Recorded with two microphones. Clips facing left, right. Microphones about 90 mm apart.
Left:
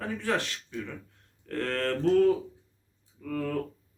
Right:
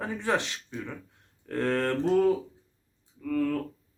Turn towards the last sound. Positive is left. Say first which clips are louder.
# right 5 dB
turn(degrees=5)  # may be behind; listen again after turning